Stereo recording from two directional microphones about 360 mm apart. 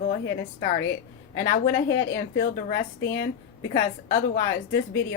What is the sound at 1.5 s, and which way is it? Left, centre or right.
A woman's voice, left.